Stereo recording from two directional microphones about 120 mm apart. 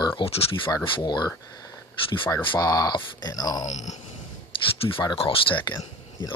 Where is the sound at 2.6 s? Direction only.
30° left (ahead or behind).